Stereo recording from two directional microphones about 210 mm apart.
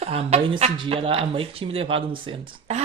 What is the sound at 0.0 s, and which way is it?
A woman's voice, 30° right (ahead or behind).